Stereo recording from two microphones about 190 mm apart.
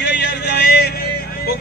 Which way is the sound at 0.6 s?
55° left (ahead or behind).